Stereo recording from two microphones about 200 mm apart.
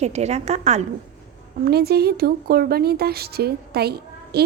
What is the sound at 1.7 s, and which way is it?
Speech, 50° right (ahead or behind).